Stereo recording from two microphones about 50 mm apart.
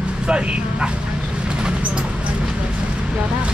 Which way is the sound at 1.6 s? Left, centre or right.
Centre.